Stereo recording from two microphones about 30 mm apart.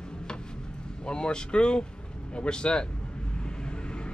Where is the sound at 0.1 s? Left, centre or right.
Left.